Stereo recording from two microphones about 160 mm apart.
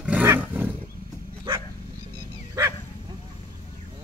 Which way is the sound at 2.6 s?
20° right (ahead or behind).